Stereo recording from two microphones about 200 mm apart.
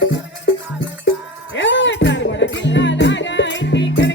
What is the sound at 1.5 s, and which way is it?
Music, 65° left (ahead or behind).